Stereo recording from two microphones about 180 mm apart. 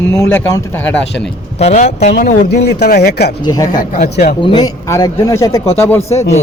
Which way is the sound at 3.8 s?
50° left (ahead or behind).